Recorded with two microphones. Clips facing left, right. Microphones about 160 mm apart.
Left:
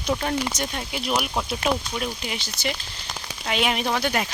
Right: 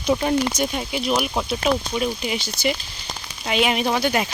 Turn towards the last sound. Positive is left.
turn(degrees=-10)  # may be behind; listen again after turning